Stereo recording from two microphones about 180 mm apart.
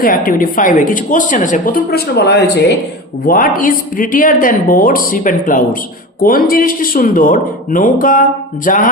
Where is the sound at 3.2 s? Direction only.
50° left (ahead or behind).